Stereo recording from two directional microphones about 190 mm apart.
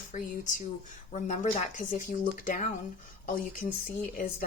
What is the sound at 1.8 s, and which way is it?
Speech, 45° left (ahead or behind).